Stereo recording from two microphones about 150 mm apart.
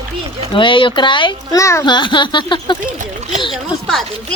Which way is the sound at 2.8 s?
55° right (ahead or behind).